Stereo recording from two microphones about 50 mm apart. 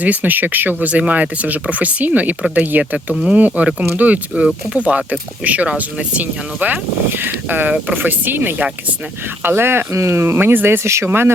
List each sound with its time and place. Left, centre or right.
0.0 s speech: right
9.9 s speech: right